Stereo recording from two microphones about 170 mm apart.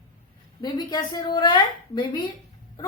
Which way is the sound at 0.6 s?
25° left (ahead or behind).